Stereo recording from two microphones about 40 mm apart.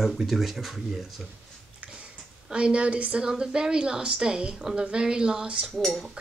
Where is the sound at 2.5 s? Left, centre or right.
Right.